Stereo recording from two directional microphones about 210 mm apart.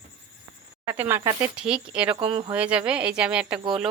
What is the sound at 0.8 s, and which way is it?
Speech, 10° right (ahead or behind).